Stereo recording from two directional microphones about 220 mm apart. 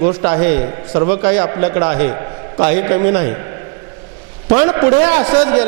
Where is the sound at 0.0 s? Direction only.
25° right (ahead or behind).